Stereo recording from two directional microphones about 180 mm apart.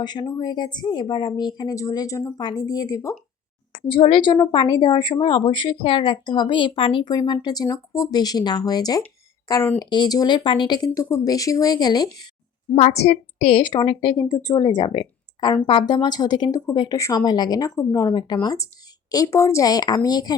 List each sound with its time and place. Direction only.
0.0 s speech: 25° left (ahead or behind)
3.8 s speech: 30° left (ahead or behind)
12.7 s speech: 35° left (ahead or behind); by 20.3 s 20° left (ahead or behind)